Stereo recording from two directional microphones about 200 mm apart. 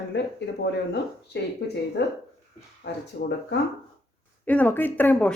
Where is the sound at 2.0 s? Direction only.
60° left (ahead or behind).